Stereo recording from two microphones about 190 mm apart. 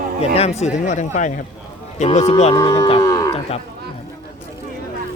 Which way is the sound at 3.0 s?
15° left (ahead or behind).